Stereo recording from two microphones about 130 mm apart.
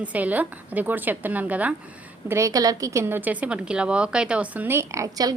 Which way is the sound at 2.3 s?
25° right (ahead or behind).